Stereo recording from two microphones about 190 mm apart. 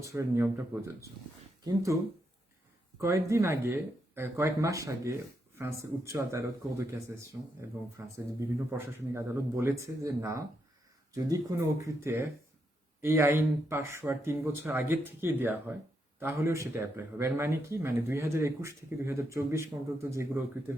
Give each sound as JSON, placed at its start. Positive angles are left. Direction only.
{"t": 0.0, "sound": "speech", "side_deg": -15}
{"t": 3.0, "sound": "speech", "side_deg": -15}